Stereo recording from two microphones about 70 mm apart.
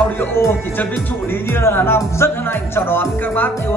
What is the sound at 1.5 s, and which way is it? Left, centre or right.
Music, left.